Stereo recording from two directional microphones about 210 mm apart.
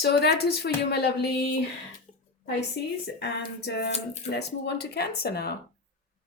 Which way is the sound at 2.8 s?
50° left (ahead or behind).